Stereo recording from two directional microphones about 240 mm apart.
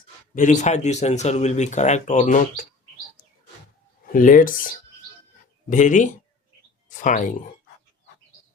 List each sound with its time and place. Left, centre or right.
0.3 s speech: left
4.1 s speech: left